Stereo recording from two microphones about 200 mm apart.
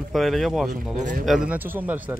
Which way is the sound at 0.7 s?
40° right (ahead or behind).